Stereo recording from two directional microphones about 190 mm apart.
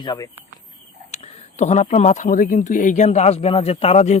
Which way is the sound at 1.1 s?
35° left (ahead or behind).